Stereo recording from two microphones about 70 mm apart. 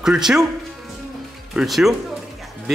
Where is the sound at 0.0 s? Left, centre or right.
Centre.